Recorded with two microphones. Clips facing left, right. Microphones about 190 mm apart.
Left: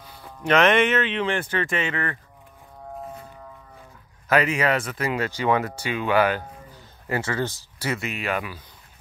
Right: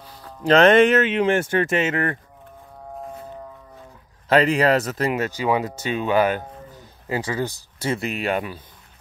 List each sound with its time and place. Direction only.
0.4 s speech: 35° right (ahead or behind)
4.3 s speech: 30° right (ahead or behind)
5.1 s speech: 15° right (ahead or behind)
7.8 s speech: 25° right (ahead or behind)